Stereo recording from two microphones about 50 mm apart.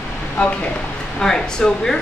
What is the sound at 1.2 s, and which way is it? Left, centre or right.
Speech, centre.